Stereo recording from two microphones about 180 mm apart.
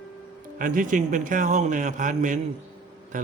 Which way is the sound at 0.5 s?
45° right (ahead or behind).